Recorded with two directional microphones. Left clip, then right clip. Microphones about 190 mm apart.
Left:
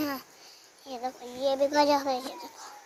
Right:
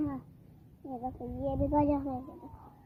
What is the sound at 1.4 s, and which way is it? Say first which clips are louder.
Speech: left 6 dB; 10° left (ahead or behind).